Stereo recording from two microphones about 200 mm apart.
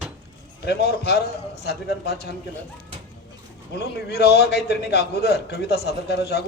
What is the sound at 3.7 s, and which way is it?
A man's voice, 55° left (ahead or behind).